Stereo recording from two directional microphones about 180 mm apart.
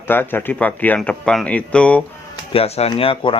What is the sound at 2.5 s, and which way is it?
Speech, 35° left (ahead or behind).